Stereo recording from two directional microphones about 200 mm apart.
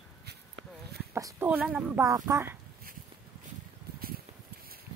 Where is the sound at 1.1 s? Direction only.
10° right (ahead or behind).